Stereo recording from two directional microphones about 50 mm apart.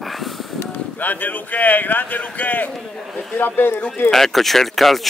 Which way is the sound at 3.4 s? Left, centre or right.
Left.